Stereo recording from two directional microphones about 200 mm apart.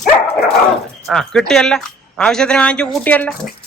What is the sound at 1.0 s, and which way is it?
Speech, centre (ahead or behind).